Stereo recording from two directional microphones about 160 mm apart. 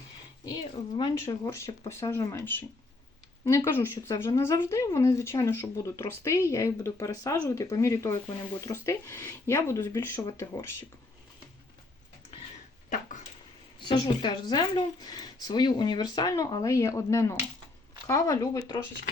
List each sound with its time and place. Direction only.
0.4 s speech: 25° left (ahead or behind)
3.7 s speech: 15° left (ahead or behind)
13.7 s speech: 30° left (ahead or behind)